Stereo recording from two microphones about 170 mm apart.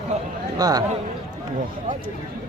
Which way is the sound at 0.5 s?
20° right (ahead or behind).